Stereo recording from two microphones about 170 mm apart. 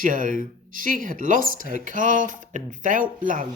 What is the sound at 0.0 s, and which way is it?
Speech, 55° right (ahead or behind).